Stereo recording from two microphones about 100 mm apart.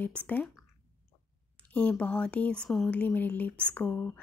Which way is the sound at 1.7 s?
10° left (ahead or behind).